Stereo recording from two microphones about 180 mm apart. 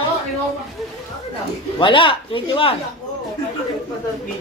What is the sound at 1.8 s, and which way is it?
Speech, 30° left (ahead or behind).